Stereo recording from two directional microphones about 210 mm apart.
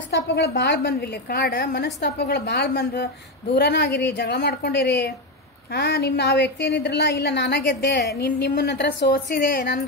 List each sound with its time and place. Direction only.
0.1 s a woman's voice: 55° left (ahead or behind)